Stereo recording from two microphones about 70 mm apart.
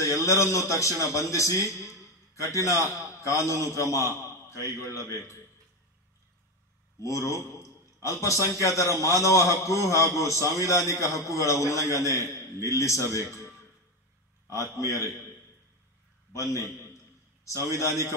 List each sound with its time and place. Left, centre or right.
0.0 s a man's voice: left
4.2 s a sound: left
4.7 s a man's voice: left
7.0 s a man's voice: left
14.5 s a man's voice: left
16.3 s a man's voice: left